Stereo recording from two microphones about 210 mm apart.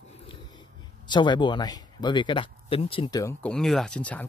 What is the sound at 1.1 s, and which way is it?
Speech, 20° left (ahead or behind).